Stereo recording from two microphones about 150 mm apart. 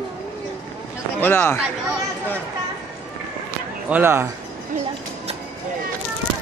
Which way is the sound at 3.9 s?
15° right (ahead or behind).